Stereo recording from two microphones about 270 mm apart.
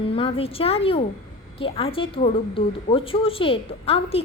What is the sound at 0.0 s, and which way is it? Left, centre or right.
A woman's voice, left.